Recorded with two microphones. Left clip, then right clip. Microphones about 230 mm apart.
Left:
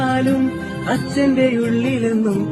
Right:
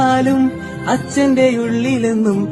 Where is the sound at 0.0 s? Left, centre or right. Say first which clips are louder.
Right 5 dB; centre.